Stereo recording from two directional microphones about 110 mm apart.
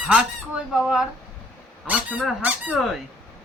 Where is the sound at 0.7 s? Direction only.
5° right (ahead or behind).